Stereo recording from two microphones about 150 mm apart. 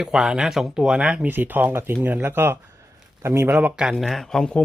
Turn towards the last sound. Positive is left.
turn(degrees=5)  # may be behind; listen again after turning